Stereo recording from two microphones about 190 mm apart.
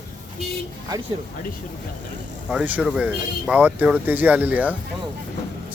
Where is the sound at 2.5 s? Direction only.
5° right (ahead or behind).